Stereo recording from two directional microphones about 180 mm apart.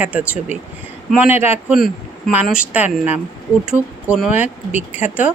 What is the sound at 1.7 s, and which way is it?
A woman's voice, centre (ahead or behind).